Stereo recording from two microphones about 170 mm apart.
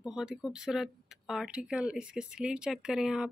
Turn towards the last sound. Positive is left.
turn(degrees=-5)  # may be behind; listen again after turning